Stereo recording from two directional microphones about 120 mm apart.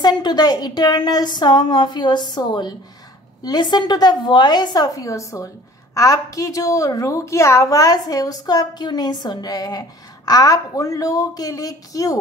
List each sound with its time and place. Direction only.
0.0 s a woman's voice: 35° left (ahead or behind)